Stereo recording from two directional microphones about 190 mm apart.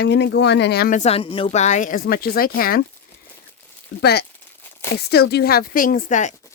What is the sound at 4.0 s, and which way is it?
Speech, 55° left (ahead or behind).